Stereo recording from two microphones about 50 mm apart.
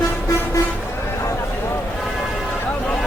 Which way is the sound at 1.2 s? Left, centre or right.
Left.